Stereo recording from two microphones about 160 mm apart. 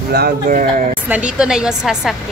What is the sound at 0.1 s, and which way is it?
Speech, 65° right (ahead or behind).